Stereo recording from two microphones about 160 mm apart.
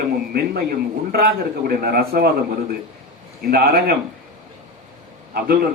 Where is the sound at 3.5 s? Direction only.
75° right (ahead or behind).